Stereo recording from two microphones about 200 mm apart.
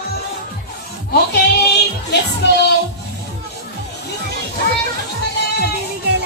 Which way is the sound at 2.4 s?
60° left (ahead or behind).